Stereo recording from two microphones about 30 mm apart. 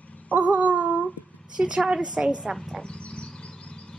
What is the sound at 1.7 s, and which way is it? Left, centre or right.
Speech, right.